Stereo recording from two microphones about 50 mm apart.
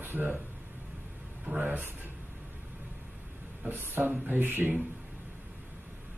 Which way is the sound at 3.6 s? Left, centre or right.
Right.